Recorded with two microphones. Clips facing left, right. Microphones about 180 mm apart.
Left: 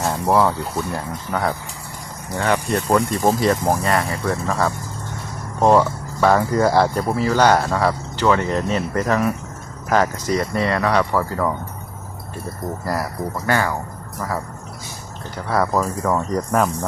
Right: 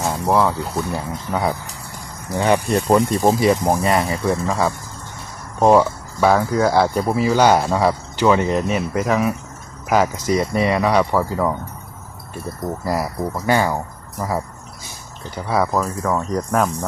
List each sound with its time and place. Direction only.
0.0 s speech: centre (ahead or behind); by 3.0 s 20° right (ahead or behind)
3.2 s speech: 10° right (ahead or behind)
12.8 s speech: 15° right (ahead or behind)
15.4 s speech: 5° right (ahead or behind)